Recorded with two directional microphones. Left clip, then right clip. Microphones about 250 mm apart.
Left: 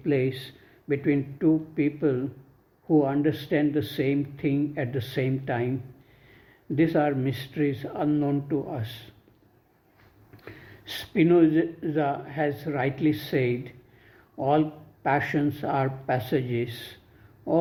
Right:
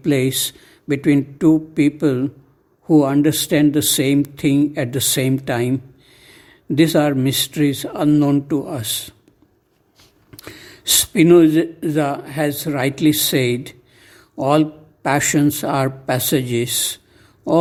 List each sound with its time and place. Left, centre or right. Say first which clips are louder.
0.0 s speech: right 8 dB; right
10.3 s speech: right 9 dB; right